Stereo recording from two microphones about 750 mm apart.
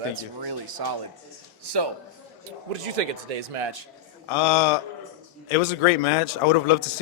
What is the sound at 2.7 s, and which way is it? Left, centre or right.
Speech, right.